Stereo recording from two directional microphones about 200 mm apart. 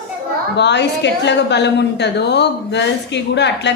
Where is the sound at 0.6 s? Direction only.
60° left (ahead or behind).